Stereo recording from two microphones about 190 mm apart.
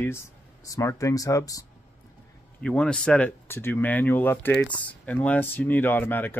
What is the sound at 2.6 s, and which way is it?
Speech, 5° left (ahead or behind).